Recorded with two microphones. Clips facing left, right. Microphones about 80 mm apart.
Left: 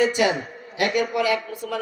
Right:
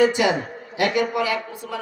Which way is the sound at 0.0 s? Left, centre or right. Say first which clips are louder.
Right 2 dB; right.